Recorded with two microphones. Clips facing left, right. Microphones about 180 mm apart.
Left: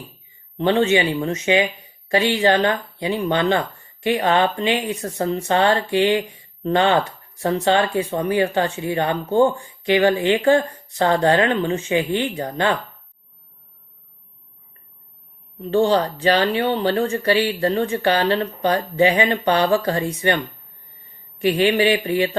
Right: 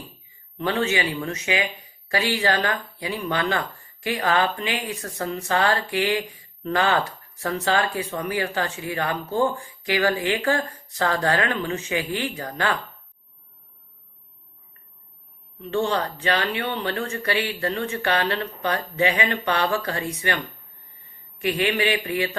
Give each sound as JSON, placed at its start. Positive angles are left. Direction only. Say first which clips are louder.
{"t": 0.5, "sound": "speech", "louder": "left 7 dB", "side_deg": 30}
{"t": 15.5, "sound": "speech", "louder": "left 7 dB", "side_deg": 35}
{"t": 21.4, "sound": "speech", "louder": "left 6 dB", "side_deg": 30}